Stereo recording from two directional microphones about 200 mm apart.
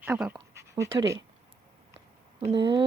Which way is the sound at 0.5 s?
15° right (ahead or behind).